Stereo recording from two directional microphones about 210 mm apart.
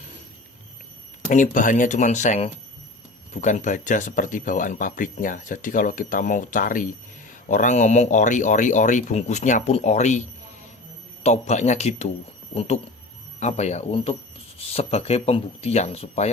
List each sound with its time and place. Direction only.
1.3 s speech: 35° left (ahead or behind)